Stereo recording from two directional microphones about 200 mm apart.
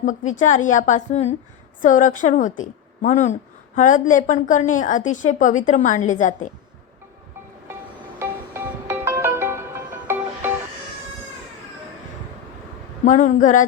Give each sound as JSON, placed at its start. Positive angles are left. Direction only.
{"t": 0.3, "sound": "a woman's voice", "side_deg": 40}
{"t": 8.2, "sound": "music", "side_deg": -10}
{"t": 13.1, "sound": "a woman's voice", "side_deg": 40}